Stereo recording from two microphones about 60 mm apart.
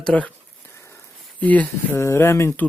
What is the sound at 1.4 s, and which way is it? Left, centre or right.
Speech, left.